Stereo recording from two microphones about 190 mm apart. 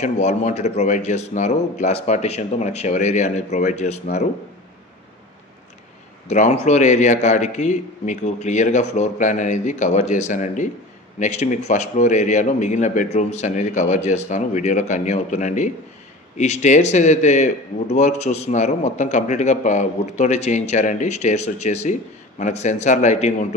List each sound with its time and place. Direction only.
0.0 s a man's voice: 40° left (ahead or behind)
6.2 s a man's voice: 40° left (ahead or behind)